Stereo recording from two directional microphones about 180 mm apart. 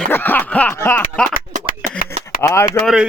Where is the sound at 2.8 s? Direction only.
Centre (ahead or behind).